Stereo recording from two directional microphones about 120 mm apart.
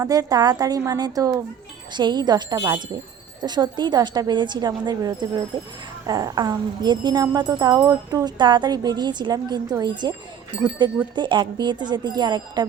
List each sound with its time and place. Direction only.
0.0 s speech: 30° right (ahead or behind)
10.5 s speech: 10° right (ahead or behind)
11.1 s speech: 40° right (ahead or behind)